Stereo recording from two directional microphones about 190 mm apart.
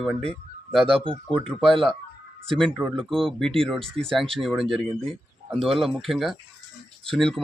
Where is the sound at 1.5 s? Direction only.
Centre (ahead or behind).